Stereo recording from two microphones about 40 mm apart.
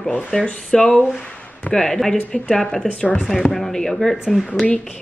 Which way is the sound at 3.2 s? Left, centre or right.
Centre.